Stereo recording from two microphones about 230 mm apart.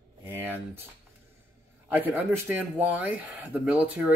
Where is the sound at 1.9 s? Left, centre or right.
Centre.